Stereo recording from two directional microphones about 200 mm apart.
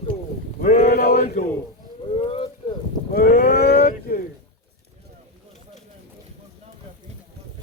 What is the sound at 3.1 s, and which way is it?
Speech, 50° left (ahead or behind).